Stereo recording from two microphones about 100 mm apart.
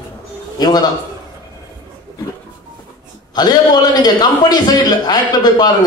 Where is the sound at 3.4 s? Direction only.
45° left (ahead or behind).